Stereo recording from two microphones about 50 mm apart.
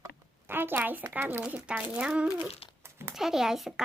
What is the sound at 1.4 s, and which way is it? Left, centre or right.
Speech, right.